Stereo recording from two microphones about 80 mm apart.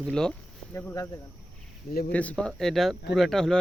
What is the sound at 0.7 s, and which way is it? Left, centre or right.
Speech, left.